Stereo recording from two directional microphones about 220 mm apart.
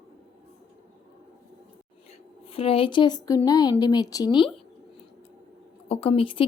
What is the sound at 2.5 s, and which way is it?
Speech, 25° left (ahead or behind).